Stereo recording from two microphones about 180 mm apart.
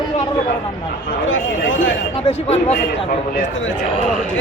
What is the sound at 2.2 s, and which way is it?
Speech, 35° left (ahead or behind).